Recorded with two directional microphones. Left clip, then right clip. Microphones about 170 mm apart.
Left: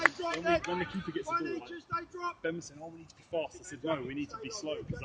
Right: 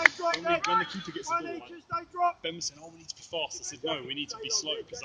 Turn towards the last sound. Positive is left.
turn(degrees=55)  # may be behind; listen again after turning